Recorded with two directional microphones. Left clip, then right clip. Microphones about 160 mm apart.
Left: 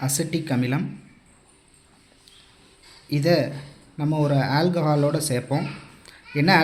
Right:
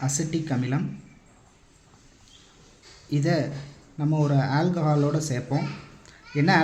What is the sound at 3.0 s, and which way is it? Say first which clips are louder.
Speech: left 5 dB; 25° left (ahead or behind).